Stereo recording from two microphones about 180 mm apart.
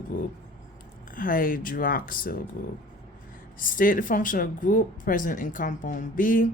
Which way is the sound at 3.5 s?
50° left (ahead or behind).